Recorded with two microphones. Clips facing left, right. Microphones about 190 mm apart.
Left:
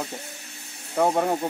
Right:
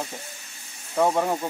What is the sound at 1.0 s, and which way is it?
Speech, 15° left (ahead or behind).